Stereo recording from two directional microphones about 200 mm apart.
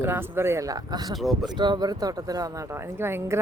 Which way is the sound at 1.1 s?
Centre (ahead or behind).